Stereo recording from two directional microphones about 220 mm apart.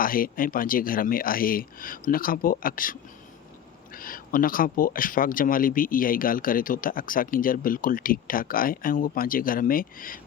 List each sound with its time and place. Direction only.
0.0 s speech: 40° left (ahead or behind)